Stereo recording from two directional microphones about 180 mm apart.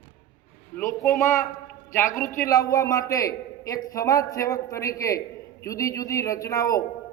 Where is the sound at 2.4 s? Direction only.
20° left (ahead or behind).